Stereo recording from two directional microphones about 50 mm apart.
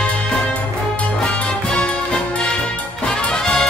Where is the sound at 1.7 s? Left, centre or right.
Left.